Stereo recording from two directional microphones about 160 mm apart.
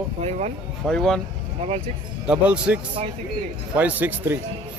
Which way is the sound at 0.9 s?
5° left (ahead or behind).